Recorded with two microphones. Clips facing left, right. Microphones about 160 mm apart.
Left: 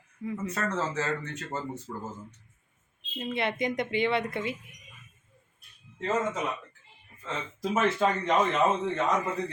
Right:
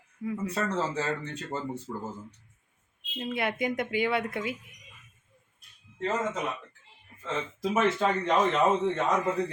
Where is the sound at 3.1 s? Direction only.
5° right (ahead or behind).